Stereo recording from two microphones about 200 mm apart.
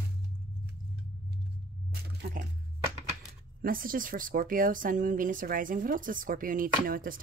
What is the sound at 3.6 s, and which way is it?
Speech, 45° right (ahead or behind).